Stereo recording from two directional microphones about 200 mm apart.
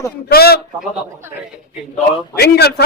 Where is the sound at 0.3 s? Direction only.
50° left (ahead or behind).